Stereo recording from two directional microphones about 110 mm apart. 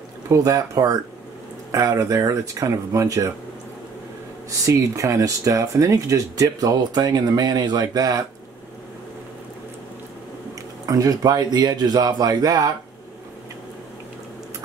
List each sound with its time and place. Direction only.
0.3 s speech: 35° right (ahead or behind)
4.5 s speech: 30° right (ahead or behind)
10.9 s speech: 35° right (ahead or behind)